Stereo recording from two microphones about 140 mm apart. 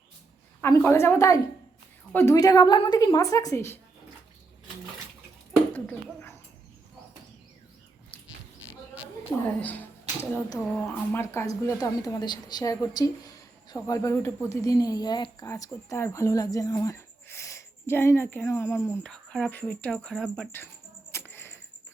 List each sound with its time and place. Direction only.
0.6 s a woman's voice: 20° left (ahead or behind)
5.7 s bird: 10° left (ahead or behind)
9.6 s a woman's voice: 10° left (ahead or behind)
19.0 s speech: 5° left (ahead or behind)
21.1 s a sound: 15° left (ahead or behind)